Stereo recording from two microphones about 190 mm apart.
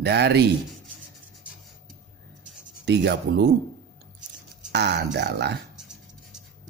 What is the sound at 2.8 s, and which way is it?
Speech, 65° right (ahead or behind).